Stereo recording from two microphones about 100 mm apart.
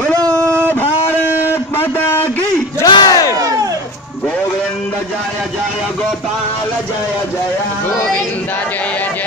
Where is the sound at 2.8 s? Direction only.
45° left (ahead or behind).